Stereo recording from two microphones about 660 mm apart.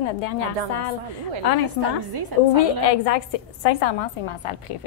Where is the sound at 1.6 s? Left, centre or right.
Right.